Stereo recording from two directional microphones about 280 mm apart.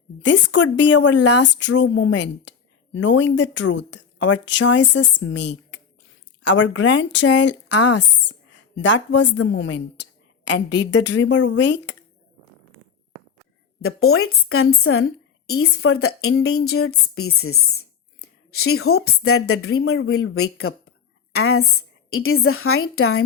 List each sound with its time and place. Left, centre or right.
0.6 s a woman's voice: left
13.8 s a woman's voice: left